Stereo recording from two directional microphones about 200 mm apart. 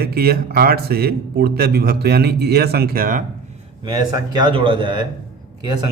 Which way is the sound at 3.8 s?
20° right (ahead or behind).